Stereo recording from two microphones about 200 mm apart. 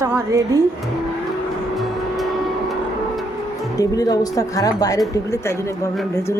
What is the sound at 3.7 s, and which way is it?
Speech, 20° left (ahead or behind).